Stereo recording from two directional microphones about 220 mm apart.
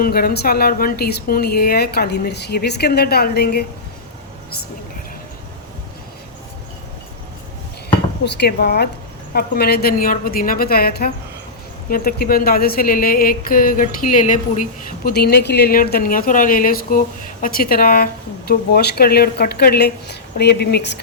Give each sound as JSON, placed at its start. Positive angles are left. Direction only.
{"t": 0.0, "sound": "a woman's voice", "side_deg": 45}
{"t": 8.2, "sound": "a woman's voice", "side_deg": 50}